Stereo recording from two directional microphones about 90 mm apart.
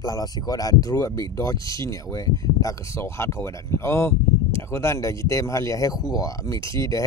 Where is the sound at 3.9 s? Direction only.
30° left (ahead or behind).